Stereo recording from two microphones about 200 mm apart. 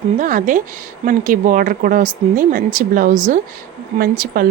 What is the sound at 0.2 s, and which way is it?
Speech, 40° right (ahead or behind).